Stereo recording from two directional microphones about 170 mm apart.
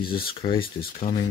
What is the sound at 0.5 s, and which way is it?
Speech, 60° left (ahead or behind).